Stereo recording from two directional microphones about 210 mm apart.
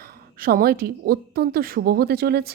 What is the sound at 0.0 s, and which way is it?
A woman's voice, 45° right (ahead or behind).